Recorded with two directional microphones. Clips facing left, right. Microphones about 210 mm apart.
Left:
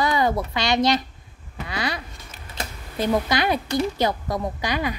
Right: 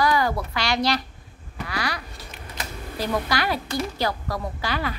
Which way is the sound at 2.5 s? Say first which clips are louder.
Left 3 dB; 25° left (ahead or behind).